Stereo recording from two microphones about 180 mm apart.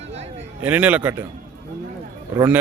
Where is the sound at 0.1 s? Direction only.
35° right (ahead or behind).